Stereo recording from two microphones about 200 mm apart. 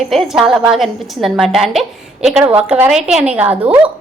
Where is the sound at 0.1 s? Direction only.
Centre (ahead or behind).